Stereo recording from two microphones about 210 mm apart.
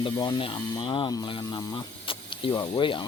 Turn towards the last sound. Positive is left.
turn(degrees=25)  # may be behind; listen again after turning